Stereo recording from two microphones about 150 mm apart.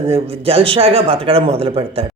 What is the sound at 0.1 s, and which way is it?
Speech, 40° right (ahead or behind).